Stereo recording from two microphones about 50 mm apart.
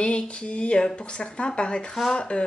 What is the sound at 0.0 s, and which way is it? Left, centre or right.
Speech, left.